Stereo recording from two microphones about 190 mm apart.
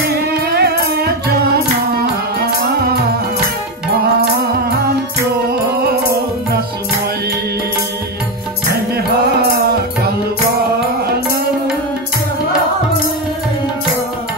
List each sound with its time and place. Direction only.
0.5 s music: 55° right (ahead or behind)